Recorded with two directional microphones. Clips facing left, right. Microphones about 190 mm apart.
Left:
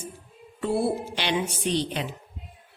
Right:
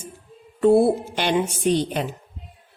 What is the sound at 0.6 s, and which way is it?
A woman's voice, 50° right (ahead or behind).